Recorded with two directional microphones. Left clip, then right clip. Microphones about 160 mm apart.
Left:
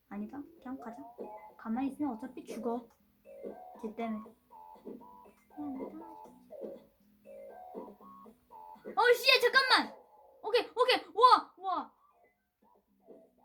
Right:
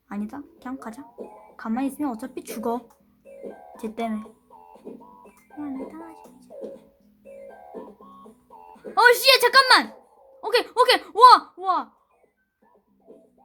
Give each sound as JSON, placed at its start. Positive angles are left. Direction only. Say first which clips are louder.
{"t": 0.1, "sound": "speech", "louder": "right 9 dB", "side_deg": -30}
{"t": 3.8, "sound": "speech", "louder": "right 10 dB", "side_deg": -35}
{"t": 4.9, "sound": "music", "louder": "right 7 dB", "side_deg": 0}
{"t": 9.0, "sound": "speech", "louder": "right 10 dB", "side_deg": -35}